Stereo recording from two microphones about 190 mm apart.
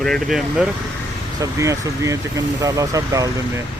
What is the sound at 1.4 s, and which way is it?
Speech, 15° right (ahead or behind).